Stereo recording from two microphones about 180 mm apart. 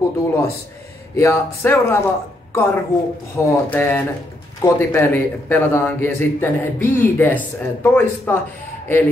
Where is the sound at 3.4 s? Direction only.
15° left (ahead or behind).